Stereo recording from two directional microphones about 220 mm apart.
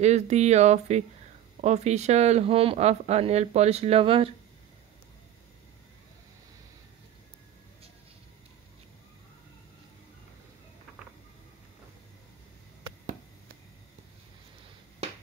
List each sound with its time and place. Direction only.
0.0 s speech: 30° right (ahead or behind)